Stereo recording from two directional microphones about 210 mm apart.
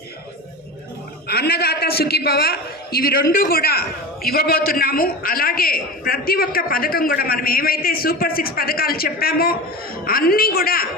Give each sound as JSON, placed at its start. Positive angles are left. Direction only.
{"t": 1.3, "sound": "a man's voice", "side_deg": 50}